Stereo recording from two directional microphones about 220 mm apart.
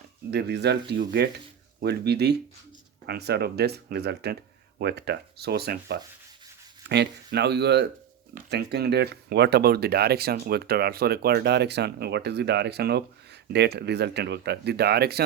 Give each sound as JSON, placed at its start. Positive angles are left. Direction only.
{"t": 0.3, "sound": "speech", "side_deg": -50}